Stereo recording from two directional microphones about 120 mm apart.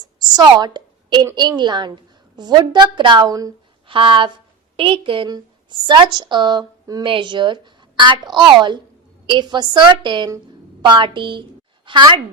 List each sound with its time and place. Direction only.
0.0 s a woman's voice: 35° right (ahead or behind)
3.2 s a woman's voice: 30° right (ahead or behind)
3.8 s a woman's voice: 45° right (ahead or behind)